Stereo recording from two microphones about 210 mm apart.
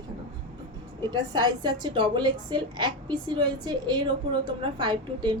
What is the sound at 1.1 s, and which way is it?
A woman's voice, 20° right (ahead or behind).